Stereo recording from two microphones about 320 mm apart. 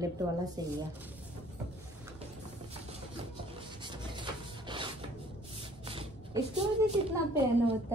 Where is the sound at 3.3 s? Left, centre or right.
Centre.